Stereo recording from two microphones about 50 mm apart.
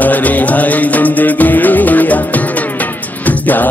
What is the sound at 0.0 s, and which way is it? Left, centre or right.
Music, left.